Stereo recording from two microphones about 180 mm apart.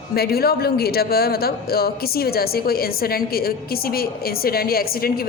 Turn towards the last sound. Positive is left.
turn(degrees=55)  # may be behind; listen again after turning